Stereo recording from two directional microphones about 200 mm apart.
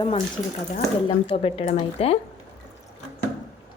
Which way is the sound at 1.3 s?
25° left (ahead or behind).